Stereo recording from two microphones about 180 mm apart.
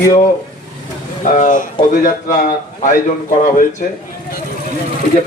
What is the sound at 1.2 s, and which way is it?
A man's voice, 45° left (ahead or behind).